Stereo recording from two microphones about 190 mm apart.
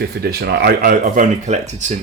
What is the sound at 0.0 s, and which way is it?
Speech, 55° right (ahead or behind).